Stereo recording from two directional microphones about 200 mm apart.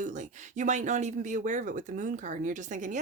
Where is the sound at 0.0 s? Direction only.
35° right (ahead or behind).